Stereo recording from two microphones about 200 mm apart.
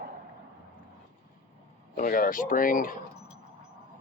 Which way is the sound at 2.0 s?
45° left (ahead or behind).